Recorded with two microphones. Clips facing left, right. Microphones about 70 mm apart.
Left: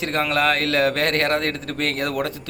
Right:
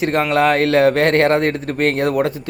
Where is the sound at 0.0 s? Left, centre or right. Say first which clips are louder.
Right 5 dB; right.